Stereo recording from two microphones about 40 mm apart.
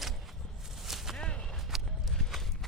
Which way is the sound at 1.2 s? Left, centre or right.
Left.